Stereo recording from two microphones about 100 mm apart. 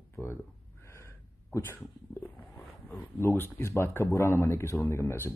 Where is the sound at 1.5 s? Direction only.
25° left (ahead or behind).